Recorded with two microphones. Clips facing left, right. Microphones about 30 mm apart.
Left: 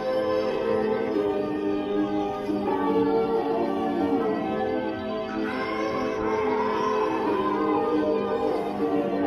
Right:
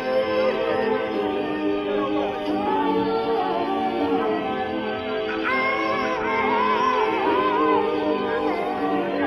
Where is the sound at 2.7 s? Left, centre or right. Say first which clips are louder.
Even; right.